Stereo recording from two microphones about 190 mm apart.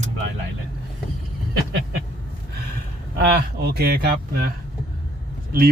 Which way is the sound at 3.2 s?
55° right (ahead or behind).